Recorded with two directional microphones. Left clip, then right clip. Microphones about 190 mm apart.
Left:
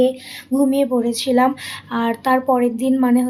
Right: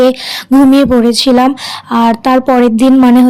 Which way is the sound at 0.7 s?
50° right (ahead or behind).